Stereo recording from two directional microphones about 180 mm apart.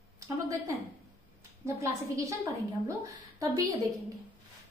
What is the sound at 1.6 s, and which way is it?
A woman's voice, 15° right (ahead or behind).